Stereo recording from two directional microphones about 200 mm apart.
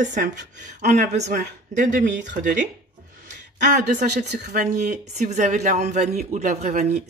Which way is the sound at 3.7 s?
40° right (ahead or behind).